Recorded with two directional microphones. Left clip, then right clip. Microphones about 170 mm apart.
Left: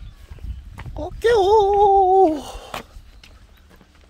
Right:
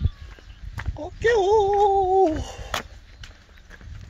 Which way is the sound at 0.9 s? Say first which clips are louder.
Left 3 dB; 45° left (ahead or behind).